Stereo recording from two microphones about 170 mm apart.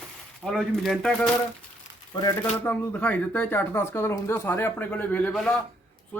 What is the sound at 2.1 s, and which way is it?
Speech, 25° left (ahead or behind).